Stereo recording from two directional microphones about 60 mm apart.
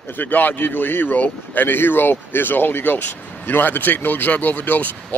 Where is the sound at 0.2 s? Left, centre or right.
Left.